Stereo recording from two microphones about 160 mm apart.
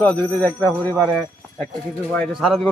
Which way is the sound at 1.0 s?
Centre (ahead or behind).